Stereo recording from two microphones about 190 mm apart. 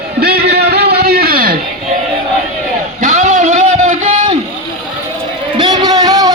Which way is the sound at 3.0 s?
40° right (ahead or behind).